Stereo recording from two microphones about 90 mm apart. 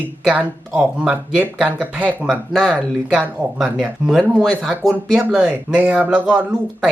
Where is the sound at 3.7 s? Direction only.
5° right (ahead or behind).